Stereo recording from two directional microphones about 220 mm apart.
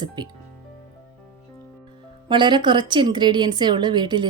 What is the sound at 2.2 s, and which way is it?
A woman's voice, 20° right (ahead or behind).